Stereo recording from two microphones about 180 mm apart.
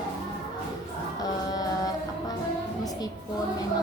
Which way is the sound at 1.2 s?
20° left (ahead or behind).